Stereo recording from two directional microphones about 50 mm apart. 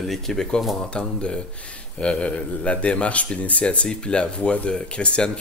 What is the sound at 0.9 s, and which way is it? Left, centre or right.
Speech, left.